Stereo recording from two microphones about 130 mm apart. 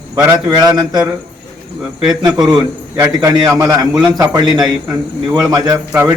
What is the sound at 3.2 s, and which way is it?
A man's voice, 30° right (ahead or behind).